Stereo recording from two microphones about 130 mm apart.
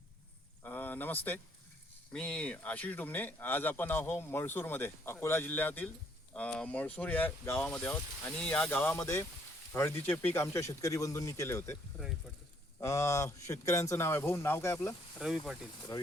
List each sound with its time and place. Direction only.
0.6 s a sound: 15° left (ahead or behind)
2.1 s a man's voice: 10° left (ahead or behind)
12.8 s speech: 20° left (ahead or behind)
15.2 s speech: 5° right (ahead or behind)
15.9 s speech: 30° left (ahead or behind)